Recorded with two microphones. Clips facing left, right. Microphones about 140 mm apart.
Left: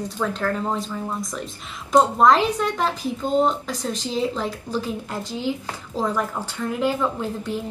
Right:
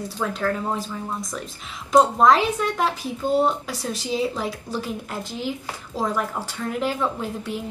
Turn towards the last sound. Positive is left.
turn(degrees=-5)  # may be behind; listen again after turning